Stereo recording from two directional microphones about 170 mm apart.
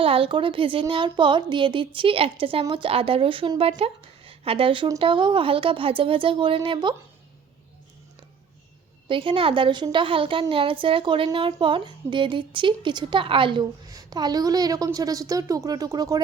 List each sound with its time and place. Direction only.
0.0 s speech: 35° right (ahead or behind)
9.0 s speech: 30° right (ahead or behind)